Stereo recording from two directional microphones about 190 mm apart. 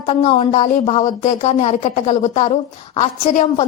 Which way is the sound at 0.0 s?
30° left (ahead or behind).